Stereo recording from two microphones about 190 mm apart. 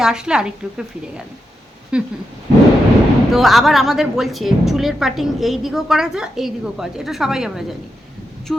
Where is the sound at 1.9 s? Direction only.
5° right (ahead or behind).